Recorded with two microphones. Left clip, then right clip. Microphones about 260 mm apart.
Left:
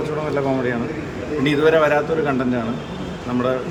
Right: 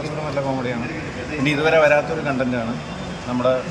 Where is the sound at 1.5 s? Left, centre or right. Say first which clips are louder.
Even; centre.